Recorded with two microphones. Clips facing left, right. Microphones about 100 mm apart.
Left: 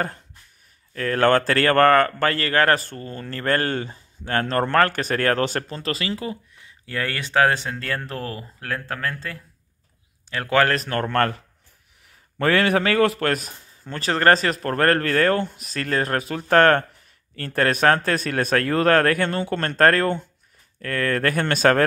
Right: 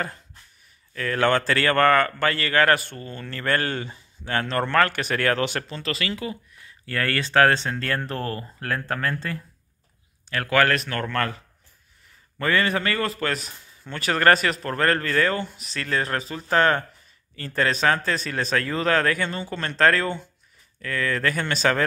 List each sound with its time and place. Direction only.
0.9 s speech: 40° left (ahead or behind)
6.6 s speech: 15° left (ahead or behind)
10.3 s speech: 25° left (ahead or behind)
11.1 s speech: 50° left (ahead or behind)
12.4 s a man's voice: 70° left (ahead or behind)
13.5 s speech: 35° left (ahead or behind); by 21.8 s 55° left (ahead or behind)